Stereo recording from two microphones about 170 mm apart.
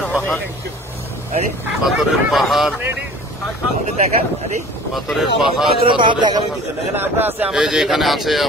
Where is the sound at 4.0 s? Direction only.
45° right (ahead or behind).